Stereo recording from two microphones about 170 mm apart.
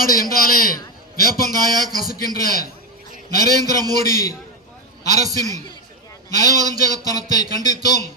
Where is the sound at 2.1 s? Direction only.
60° left (ahead or behind).